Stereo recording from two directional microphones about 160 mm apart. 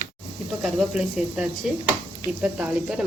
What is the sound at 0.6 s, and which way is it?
A woman's voice, 5° right (ahead or behind).